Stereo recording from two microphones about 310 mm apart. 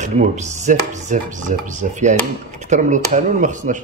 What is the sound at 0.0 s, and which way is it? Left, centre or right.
Speech, right.